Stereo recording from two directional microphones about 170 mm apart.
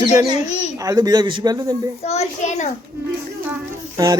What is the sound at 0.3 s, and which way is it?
Speech, 40° left (ahead or behind).